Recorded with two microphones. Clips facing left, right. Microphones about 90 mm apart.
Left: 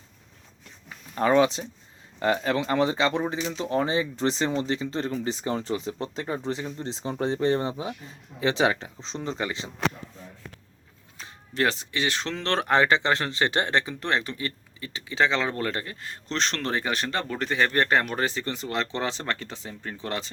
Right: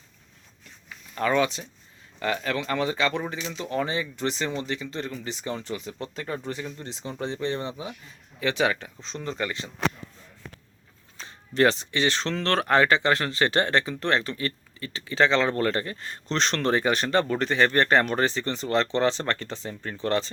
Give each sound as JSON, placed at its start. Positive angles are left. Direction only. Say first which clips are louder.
{"t": 1.1, "sound": "speech", "louder": "left 3 dB", "side_deg": 30}
{"t": 11.2, "sound": "speech", "louder": "right 5 dB", "side_deg": 5}